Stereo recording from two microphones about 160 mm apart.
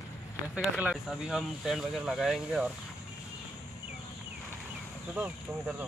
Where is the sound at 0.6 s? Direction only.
Centre (ahead or behind).